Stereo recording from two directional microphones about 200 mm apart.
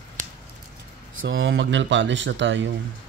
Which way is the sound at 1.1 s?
75° right (ahead or behind).